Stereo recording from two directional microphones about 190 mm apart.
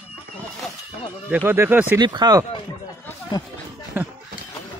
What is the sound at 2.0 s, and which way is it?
Speech, 25° right (ahead or behind).